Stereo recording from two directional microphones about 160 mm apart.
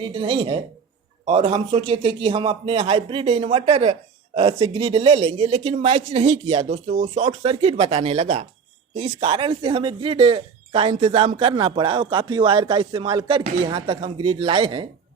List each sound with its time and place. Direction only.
0.0 s speech: 30° right (ahead or behind)